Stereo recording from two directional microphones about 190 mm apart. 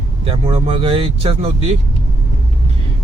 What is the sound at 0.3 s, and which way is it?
Speech, 30° right (ahead or behind).